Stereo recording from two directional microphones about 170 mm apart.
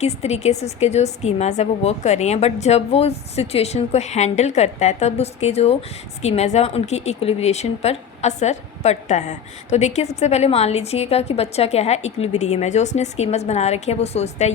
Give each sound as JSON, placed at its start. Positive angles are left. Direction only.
{"t": 0.0, "sound": "speech", "side_deg": 40}